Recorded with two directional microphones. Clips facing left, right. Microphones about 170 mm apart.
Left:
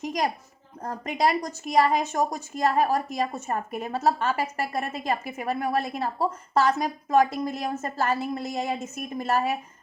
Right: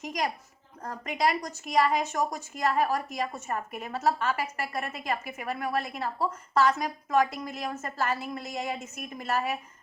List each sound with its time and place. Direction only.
0.0 s a woman's voice: 30° left (ahead or behind)